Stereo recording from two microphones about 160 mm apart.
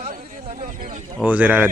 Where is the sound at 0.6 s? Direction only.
60° right (ahead or behind).